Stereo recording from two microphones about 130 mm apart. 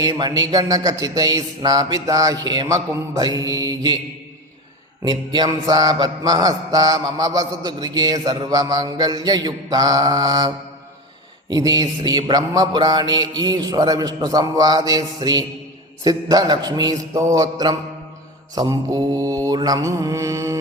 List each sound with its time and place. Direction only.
0.0 s mantra: 30° right (ahead or behind)
5.0 s mantra: 30° right (ahead or behind)